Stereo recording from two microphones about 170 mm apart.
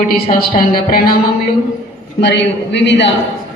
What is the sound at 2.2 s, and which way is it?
Speech, 90° left.